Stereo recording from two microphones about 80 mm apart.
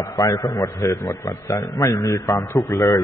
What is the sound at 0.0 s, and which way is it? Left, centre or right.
A man's voice, left.